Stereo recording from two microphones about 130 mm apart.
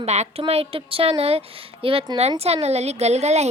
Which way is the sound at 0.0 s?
55° right (ahead or behind).